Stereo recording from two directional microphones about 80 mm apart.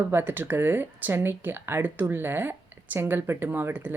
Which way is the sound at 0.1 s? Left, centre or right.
Right.